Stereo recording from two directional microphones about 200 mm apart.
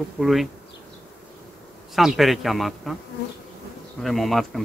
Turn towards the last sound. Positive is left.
turn(degrees=0)  # may be behind; listen again after turning